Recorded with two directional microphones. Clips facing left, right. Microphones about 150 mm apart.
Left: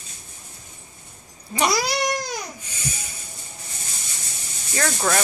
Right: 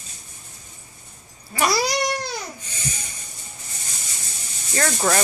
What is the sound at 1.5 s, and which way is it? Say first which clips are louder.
Cat: even; 20° left (ahead or behind).